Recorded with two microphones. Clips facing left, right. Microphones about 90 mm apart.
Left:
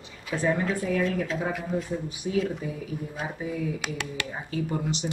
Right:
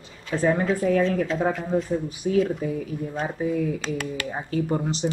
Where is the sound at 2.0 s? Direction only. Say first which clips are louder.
Right 5 dB; 45° right (ahead or behind).